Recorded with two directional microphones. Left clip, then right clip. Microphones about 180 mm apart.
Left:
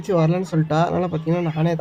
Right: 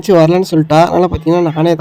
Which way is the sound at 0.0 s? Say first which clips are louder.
Right 12 dB; 55° right (ahead or behind).